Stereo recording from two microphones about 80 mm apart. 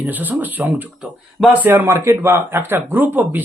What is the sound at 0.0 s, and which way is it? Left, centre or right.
Speech, right.